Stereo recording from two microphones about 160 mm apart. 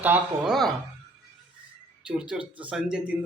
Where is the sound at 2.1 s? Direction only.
5° right (ahead or behind).